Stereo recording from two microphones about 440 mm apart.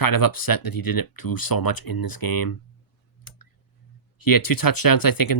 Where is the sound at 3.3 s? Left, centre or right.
Left.